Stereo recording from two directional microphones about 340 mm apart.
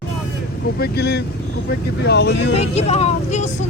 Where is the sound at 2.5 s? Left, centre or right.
Centre.